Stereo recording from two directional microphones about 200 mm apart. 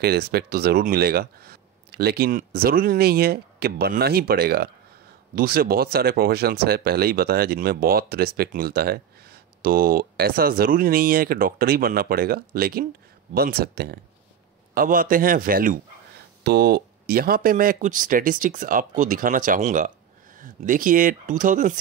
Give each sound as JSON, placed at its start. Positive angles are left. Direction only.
{"t": 0.0, "sound": "speech", "side_deg": -50}